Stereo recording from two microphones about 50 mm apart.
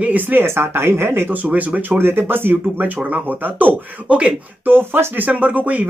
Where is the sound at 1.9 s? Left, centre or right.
Right.